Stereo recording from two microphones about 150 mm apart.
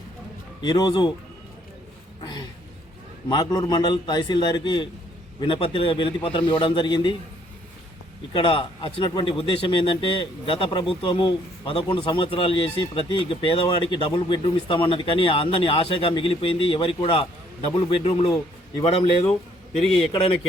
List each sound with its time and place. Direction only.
0.6 s a man's voice: 30° left (ahead or behind)
3.2 s a man's voice: 30° left (ahead or behind)
8.3 s speech: 35° left (ahead or behind)